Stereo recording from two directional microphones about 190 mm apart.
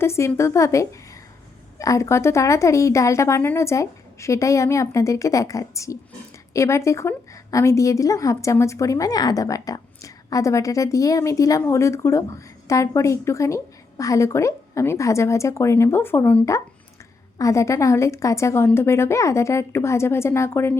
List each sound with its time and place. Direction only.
0.0 s a woman's voice: 15° left (ahead or behind)